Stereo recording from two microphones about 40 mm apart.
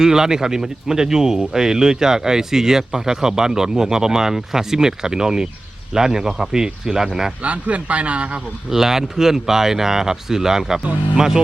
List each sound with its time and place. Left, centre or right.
0.0 s speech: centre
7.4 s speech: right
8.7 s speech: centre